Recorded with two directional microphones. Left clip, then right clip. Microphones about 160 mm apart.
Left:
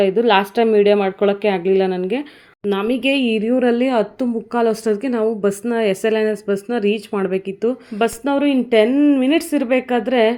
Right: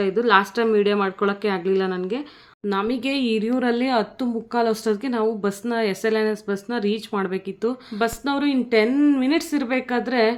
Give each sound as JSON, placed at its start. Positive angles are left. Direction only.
{"t": 0.0, "sound": "a woman's voice", "side_deg": 10}
{"t": 2.9, "sound": "speech", "side_deg": -40}
{"t": 3.2, "sound": "a woman's voice", "side_deg": 10}